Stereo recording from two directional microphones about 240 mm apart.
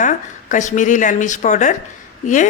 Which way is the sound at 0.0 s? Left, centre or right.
Left.